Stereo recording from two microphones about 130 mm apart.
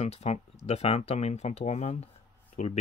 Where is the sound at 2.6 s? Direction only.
70° left (ahead or behind).